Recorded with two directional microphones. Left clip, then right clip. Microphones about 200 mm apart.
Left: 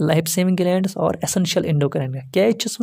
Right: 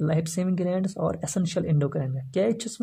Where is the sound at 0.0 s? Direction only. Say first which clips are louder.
Left 9 dB; 40° left (ahead or behind).